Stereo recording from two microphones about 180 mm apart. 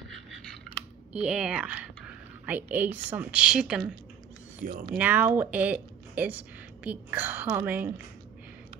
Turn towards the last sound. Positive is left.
turn(degrees=-10)  # may be behind; listen again after turning